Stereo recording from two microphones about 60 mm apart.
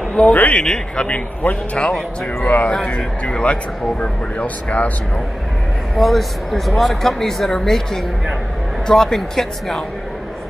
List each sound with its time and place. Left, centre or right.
0.1 s a man's voice: left
5.9 s speech: centre